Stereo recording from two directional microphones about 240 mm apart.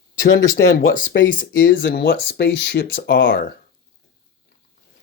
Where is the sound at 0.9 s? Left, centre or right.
Left.